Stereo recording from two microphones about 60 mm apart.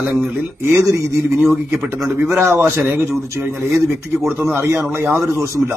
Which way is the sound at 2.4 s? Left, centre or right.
Right.